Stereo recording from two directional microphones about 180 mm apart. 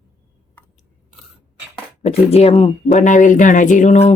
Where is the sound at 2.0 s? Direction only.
35° left (ahead or behind).